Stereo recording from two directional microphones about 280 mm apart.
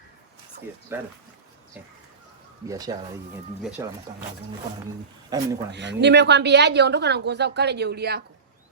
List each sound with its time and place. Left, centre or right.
0.9 s speech: centre
2.6 s speech: centre
5.3 s speech: centre
5.7 s speech: right